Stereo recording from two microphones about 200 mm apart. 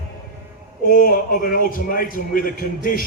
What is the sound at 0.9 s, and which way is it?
A man's voice, 45° left (ahead or behind).